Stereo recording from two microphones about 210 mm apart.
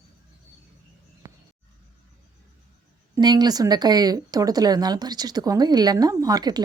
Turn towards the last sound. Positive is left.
turn(degrees=-20)  # may be behind; listen again after turning